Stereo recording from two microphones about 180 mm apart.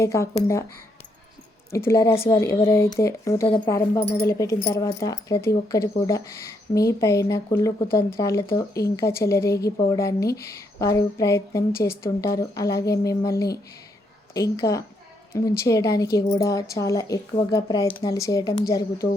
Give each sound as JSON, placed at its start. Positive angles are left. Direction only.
{"t": 0.0, "sound": "speech", "side_deg": 15}
{"t": 1.7, "sound": "a woman's voice", "side_deg": 15}